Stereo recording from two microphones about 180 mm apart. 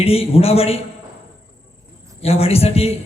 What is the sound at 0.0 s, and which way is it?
Speech, 35° left (ahead or behind).